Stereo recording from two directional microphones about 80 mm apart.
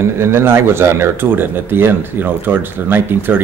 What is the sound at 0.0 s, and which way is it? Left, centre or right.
Speech, right.